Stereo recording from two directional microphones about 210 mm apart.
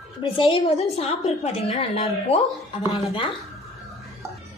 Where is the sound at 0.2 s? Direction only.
25° left (ahead or behind).